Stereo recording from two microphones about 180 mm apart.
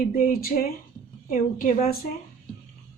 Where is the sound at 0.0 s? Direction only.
50° left (ahead or behind).